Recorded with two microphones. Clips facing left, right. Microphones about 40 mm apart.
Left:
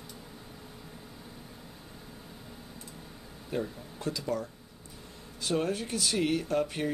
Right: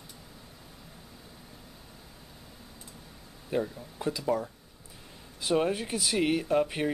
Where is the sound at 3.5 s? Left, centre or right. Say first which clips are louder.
Right 3 dB; centre.